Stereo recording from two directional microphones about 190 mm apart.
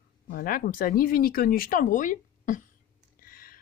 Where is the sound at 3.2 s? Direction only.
50° left (ahead or behind).